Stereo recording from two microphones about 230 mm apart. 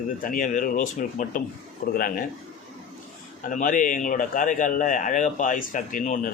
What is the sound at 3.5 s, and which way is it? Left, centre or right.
Speech, left.